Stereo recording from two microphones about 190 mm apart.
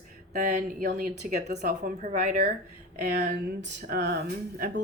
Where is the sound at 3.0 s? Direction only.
60° right (ahead or behind).